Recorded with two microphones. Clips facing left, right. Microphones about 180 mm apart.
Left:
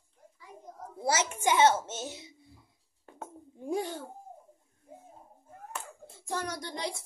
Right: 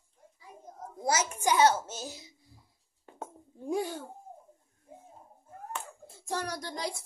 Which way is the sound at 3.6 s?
15° left (ahead or behind).